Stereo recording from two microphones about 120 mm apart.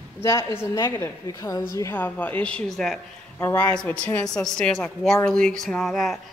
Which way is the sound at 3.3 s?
15° left (ahead or behind).